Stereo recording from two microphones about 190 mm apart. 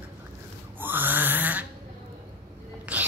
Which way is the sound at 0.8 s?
10° right (ahead or behind).